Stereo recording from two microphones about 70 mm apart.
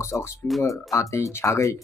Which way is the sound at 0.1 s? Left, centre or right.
Left.